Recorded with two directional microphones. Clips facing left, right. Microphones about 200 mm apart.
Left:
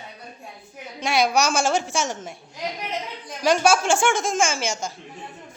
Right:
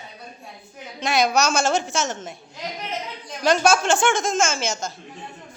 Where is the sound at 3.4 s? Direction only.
10° left (ahead or behind).